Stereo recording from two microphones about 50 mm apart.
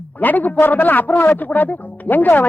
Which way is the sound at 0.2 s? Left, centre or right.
Left.